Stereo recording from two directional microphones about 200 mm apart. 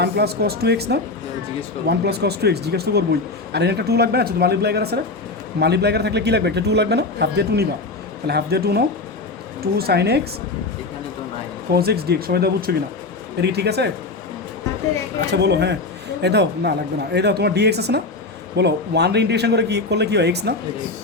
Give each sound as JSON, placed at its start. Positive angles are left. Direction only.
{"t": 0.0, "sound": "a man's voice", "side_deg": -55}
{"t": 11.7, "sound": "a man's voice", "side_deg": -50}
{"t": 15.3, "sound": "a man's voice", "side_deg": -55}